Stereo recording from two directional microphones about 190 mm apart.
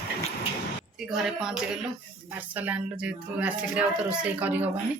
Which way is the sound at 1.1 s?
Centre (ahead or behind).